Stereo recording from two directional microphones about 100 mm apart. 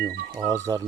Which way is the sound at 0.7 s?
35° right (ahead or behind).